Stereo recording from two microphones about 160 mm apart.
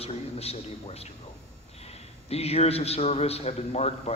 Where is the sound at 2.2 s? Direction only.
40° left (ahead or behind).